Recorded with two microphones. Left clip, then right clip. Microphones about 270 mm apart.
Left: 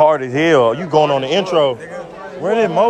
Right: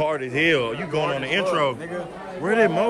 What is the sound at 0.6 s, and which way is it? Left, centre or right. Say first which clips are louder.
Speech: left 12 dB; left.